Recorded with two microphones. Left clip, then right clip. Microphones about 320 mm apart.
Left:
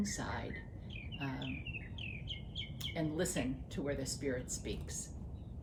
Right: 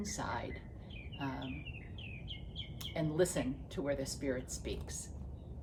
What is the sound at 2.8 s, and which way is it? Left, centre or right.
Speech, centre.